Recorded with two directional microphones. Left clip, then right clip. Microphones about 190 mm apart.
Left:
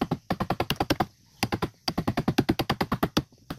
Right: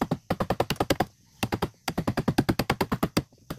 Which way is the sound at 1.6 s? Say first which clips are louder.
Even; 5° right (ahead or behind).